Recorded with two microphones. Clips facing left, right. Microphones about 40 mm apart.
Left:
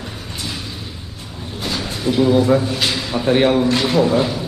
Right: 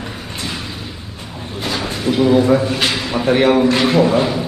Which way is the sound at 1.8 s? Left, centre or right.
Right.